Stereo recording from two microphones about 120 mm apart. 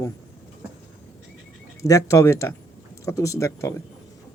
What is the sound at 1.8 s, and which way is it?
A man's voice, 30° left (ahead or behind).